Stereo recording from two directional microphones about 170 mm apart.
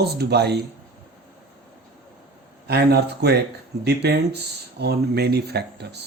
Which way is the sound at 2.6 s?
75° right (ahead or behind).